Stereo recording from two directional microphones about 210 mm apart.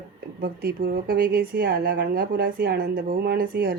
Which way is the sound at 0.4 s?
45° right (ahead or behind).